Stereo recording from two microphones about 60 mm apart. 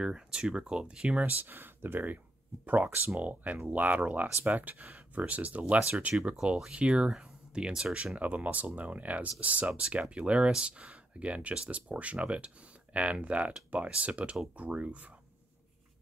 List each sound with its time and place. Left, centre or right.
0.0 s speech: centre